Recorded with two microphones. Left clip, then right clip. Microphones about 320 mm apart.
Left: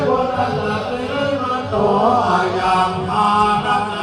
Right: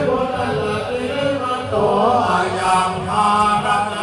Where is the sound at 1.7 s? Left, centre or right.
Left.